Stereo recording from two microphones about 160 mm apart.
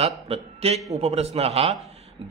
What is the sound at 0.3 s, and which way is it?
A man's voice, 40° right (ahead or behind).